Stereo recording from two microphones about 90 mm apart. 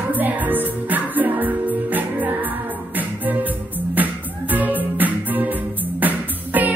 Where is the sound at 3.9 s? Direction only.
20° right (ahead or behind).